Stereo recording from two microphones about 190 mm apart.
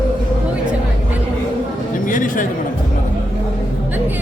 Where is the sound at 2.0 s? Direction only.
45° left (ahead or behind).